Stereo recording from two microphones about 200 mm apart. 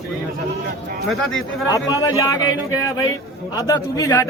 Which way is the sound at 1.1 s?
Centre (ahead or behind).